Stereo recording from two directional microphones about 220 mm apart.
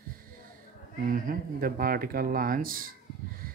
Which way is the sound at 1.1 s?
40° right (ahead or behind).